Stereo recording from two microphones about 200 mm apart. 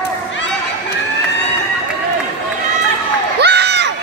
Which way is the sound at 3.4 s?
55° right (ahead or behind).